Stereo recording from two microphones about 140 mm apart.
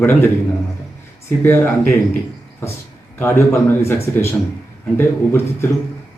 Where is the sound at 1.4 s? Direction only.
15° left (ahead or behind).